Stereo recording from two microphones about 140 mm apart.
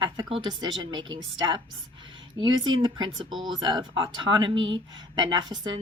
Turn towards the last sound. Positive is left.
turn(degrees=-35)  # may be behind; listen again after turning